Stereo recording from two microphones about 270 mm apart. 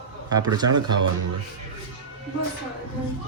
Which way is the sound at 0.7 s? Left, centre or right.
Right.